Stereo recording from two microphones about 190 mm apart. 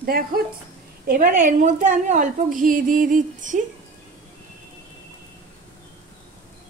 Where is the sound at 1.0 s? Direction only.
45° right (ahead or behind).